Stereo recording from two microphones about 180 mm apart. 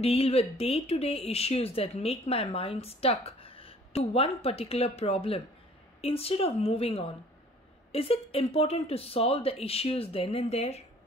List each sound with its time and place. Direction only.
0.0 s speech: 35° left (ahead or behind)